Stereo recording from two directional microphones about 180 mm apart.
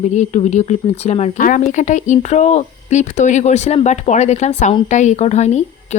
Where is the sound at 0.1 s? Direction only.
40° left (ahead or behind).